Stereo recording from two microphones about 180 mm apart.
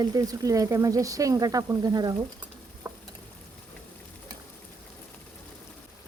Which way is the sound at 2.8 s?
15° right (ahead or behind).